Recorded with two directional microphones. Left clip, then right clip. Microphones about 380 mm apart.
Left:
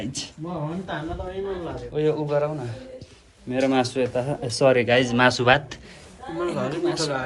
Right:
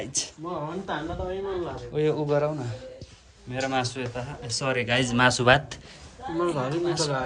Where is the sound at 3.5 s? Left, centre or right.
Centre.